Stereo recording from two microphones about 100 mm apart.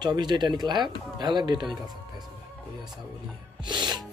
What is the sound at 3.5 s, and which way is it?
Music, 50° right (ahead or behind).